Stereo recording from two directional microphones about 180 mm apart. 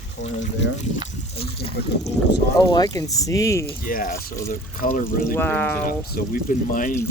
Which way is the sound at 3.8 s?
50° left (ahead or behind).